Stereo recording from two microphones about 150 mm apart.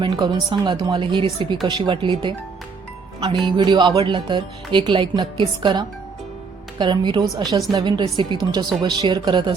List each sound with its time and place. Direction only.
0.0 s speech: 30° right (ahead or behind)
3.4 s speech: 30° right (ahead or behind)